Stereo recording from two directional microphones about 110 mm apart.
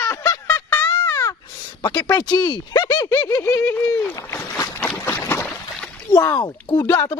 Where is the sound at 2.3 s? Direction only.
40° left (ahead or behind).